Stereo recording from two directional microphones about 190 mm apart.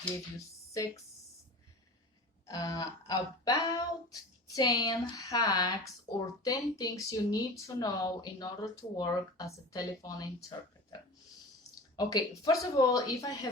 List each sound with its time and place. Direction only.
0.3 s speech: 15° left (ahead or behind)
2.5 s speech: 20° left (ahead or behind)
11.9 s speech: 20° left (ahead or behind)